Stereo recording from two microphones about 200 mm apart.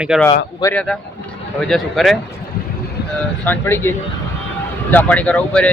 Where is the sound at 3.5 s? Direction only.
10° left (ahead or behind).